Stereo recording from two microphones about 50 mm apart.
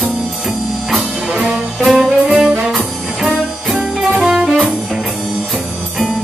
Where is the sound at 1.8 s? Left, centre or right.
Centre.